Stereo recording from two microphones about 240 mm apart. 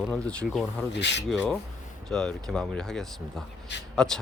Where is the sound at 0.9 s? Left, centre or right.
Left.